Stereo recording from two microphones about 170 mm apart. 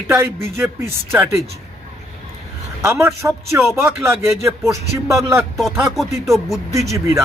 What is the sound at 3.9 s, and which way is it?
Speech, 15° right (ahead or behind).